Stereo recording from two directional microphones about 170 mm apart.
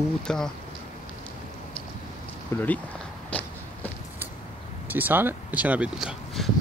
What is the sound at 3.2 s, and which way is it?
Walk, 10° left (ahead or behind).